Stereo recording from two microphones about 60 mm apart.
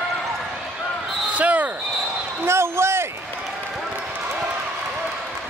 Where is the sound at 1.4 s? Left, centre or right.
Right.